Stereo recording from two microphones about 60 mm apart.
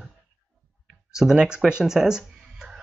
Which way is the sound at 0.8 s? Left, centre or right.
Centre.